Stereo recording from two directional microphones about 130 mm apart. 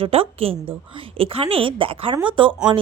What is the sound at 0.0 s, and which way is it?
Speech, 45° right (ahead or behind).